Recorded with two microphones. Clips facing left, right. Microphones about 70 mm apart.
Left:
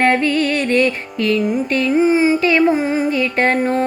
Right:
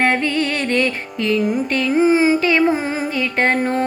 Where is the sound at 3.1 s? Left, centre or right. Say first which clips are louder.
Left 2 dB; right.